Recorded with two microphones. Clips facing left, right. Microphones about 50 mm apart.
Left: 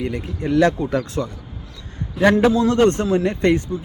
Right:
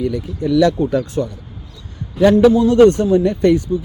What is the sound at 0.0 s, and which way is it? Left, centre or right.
Speech, left.